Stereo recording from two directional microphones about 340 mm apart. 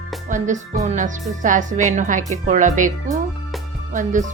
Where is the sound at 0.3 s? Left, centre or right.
Right.